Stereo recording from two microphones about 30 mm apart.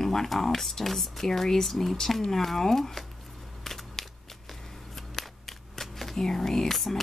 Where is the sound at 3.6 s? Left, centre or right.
Centre.